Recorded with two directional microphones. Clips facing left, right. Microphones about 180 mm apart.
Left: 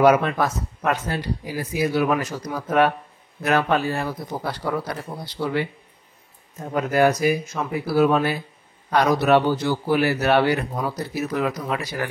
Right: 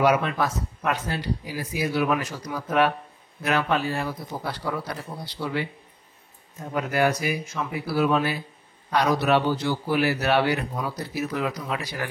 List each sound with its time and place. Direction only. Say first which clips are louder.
0.0 s speech: left 4 dB; 50° left (ahead or behind)
6.7 s speech: left 4 dB; 45° left (ahead or behind)